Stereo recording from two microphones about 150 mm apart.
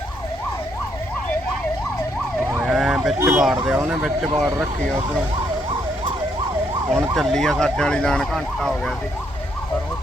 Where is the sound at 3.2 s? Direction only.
15° right (ahead or behind).